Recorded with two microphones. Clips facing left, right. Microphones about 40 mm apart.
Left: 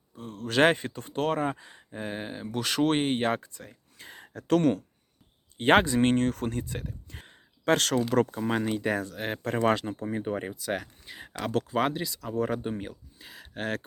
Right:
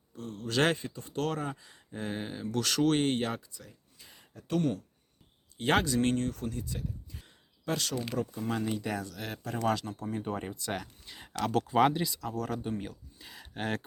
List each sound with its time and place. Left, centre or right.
0.3 s speech: left
0.8 s speech: left
1.1 s speech: left
1.9 s speech: centre; by 3.8 s left
3.9 s a sound: left
5.5 s speech: left
6.1 s speech: left
8.4 s speech: left; by 11.5 s centre
11.5 s speech: centre
12.3 s speech: left
12.9 s speech: centre